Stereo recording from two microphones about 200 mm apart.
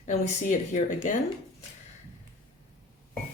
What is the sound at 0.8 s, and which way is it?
Speech, 35° left (ahead or behind).